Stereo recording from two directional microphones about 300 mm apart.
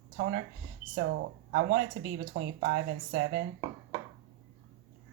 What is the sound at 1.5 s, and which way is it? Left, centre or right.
Speech, right.